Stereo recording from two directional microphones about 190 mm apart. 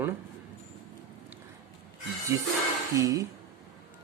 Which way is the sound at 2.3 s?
15° right (ahead or behind).